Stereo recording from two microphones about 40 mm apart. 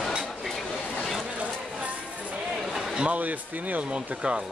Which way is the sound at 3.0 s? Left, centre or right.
Right.